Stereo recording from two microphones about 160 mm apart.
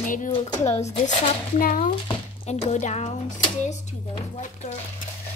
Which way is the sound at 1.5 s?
60° left (ahead or behind).